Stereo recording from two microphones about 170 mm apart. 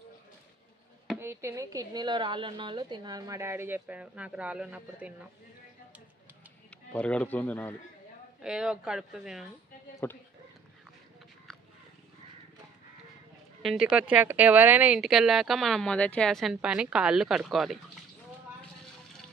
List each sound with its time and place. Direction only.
1.2 s a woman's voice: 15° right (ahead or behind)
6.9 s speech: 5° left (ahead or behind)
8.4 s speech: 5° right (ahead or behind)
10.0 s speech: 15° left (ahead or behind)
13.6 s speech: centre (ahead or behind)